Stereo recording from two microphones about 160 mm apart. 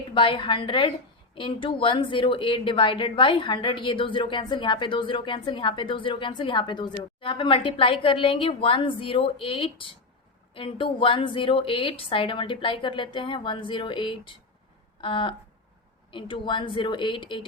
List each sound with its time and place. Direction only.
0.1 s a woman's voice: 30° left (ahead or behind)